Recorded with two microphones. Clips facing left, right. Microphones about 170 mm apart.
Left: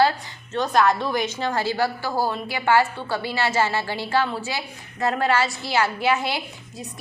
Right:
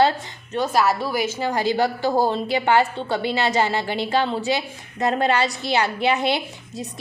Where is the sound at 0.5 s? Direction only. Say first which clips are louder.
Even; 5° right (ahead or behind).